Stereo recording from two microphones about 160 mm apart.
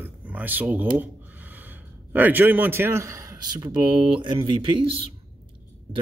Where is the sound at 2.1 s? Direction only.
10° right (ahead or behind); by 5.0 s 30° right (ahead or behind).